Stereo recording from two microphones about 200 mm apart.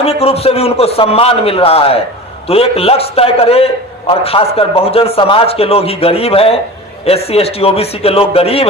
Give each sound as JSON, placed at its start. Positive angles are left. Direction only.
{"t": 0.0, "sound": "a man's voice", "side_deg": 30}